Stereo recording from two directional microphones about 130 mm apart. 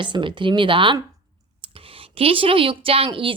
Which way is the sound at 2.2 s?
45° right (ahead or behind).